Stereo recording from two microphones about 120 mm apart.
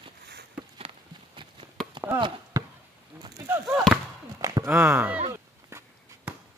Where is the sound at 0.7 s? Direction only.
45° right (ahead or behind).